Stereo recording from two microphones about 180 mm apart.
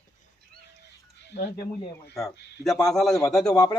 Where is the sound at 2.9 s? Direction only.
Centre (ahead or behind).